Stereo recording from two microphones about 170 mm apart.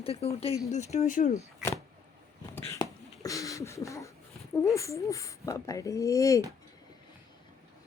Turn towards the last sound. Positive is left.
turn(degrees=20)  # may be behind; listen again after turning